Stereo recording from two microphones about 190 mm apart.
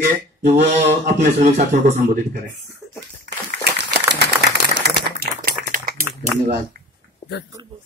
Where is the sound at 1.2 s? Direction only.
40° right (ahead or behind).